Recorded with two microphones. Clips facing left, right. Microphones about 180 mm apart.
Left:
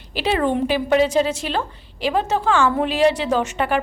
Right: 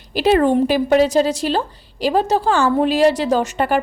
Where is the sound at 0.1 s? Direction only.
45° right (ahead or behind).